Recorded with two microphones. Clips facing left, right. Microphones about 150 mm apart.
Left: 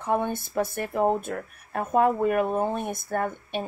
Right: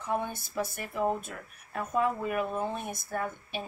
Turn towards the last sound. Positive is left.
turn(degrees=60)  # may be behind; listen again after turning